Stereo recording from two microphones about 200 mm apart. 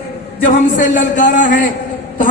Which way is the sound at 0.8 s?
40° left (ahead or behind).